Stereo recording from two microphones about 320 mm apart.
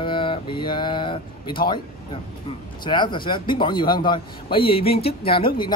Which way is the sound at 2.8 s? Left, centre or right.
Centre.